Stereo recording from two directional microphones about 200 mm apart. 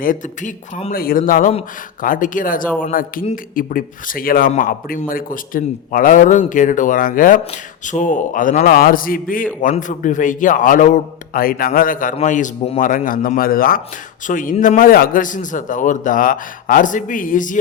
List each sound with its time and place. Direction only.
0.0 s a man's voice: 45° left (ahead or behind)